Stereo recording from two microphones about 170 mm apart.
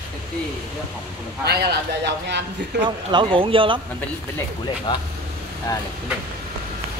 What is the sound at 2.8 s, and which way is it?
Speech, 30° right (ahead or behind).